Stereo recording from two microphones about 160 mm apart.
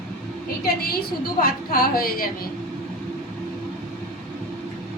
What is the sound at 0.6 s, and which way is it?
A woman's voice, 70° left (ahead or behind).